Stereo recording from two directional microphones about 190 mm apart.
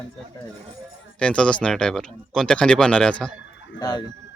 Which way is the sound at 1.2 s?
5° left (ahead or behind).